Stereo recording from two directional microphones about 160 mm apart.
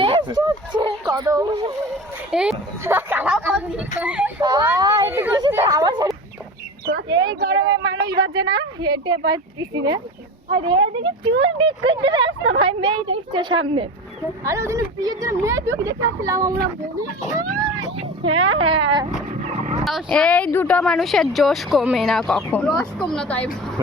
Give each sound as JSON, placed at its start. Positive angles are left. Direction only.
{"t": 0.0, "sound": "a sound", "side_deg": -30}
{"t": 1.0, "sound": "speech", "side_deg": -20}
{"t": 2.3, "sound": "speech", "side_deg": -5}
{"t": 4.4, "sound": "speech", "side_deg": -25}
{"t": 14.4, "sound": "speech", "side_deg": -15}
{"t": 17.9, "sound": "speech", "side_deg": -35}
{"t": 19.5, "sound": "dog", "side_deg": -40}
{"t": 19.8, "sound": "speech", "side_deg": 0}